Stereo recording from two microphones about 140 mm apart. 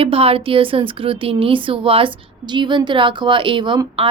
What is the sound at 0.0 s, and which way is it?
A woman's voice, 45° right (ahead or behind).